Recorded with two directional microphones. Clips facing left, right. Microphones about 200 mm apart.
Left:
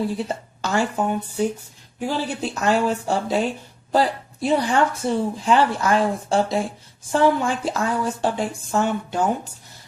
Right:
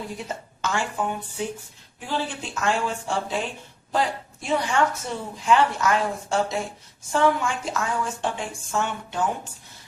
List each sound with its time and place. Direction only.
0.2 s a woman's voice: 35° left (ahead or behind)
2.0 s speech: 40° left (ahead or behind)